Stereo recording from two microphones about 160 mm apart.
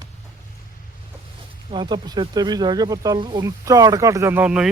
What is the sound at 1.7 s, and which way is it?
Speech, 25° right (ahead or behind).